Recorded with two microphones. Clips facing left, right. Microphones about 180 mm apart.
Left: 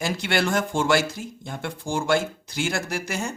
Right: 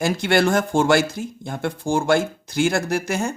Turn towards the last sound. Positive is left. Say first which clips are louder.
# right 6 dB
turn(degrees=-50)  # may be behind; listen again after turning